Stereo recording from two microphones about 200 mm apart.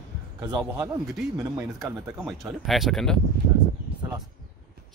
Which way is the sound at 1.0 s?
Centre (ahead or behind).